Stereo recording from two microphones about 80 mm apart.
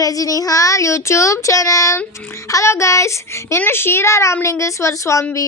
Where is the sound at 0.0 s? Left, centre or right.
Left.